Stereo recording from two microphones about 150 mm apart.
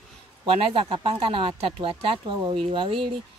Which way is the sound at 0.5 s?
40° right (ahead or behind).